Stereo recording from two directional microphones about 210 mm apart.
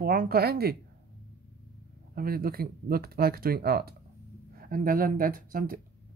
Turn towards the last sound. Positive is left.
turn(degrees=-45)  # may be behind; listen again after turning